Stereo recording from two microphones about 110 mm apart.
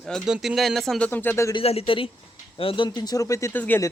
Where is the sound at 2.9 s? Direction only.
35° left (ahead or behind).